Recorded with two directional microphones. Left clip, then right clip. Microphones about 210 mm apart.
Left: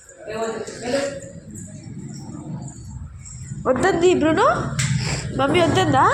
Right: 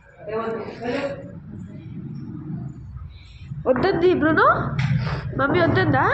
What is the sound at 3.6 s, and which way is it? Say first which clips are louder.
Speech: left 1 dB; 10° left (ahead or behind).